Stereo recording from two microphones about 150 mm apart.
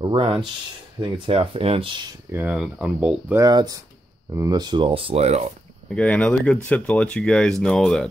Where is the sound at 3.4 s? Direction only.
25° right (ahead or behind); by 5.5 s 45° right (ahead or behind).